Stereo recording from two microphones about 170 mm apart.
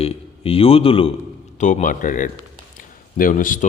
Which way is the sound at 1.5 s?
45° left (ahead or behind).